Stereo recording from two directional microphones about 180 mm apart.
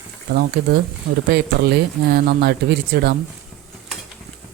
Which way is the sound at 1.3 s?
65° right (ahead or behind).